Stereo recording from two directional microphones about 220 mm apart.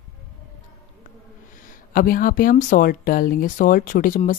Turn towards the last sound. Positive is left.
turn(degrees=40)  # may be behind; listen again after turning